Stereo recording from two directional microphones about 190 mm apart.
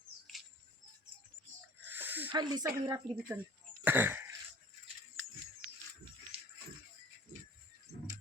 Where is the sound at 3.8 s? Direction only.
10° right (ahead or behind).